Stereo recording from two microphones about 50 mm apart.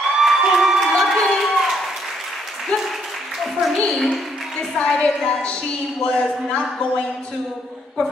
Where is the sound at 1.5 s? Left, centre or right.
Centre.